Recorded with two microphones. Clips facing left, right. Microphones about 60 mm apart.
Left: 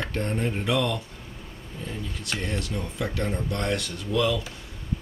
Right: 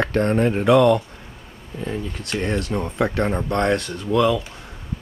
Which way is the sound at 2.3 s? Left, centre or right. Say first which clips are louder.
Right 8 dB; right.